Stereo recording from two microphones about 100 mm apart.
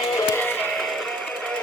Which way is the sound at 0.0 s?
35° left (ahead or behind).